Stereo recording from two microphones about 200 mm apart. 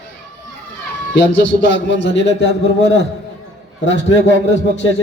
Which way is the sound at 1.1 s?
65° left (ahead or behind).